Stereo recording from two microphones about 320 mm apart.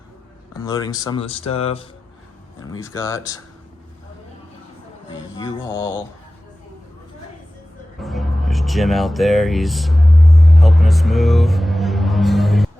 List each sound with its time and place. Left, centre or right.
0.5 s speech: centre
5.4 s speech: centre
7.9 s a sound: centre